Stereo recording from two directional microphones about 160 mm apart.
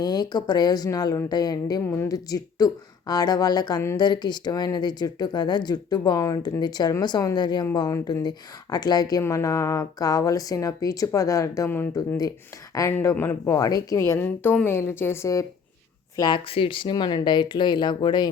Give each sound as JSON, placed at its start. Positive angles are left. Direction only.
{"t": 0.0, "sound": "a woman's voice", "side_deg": 25}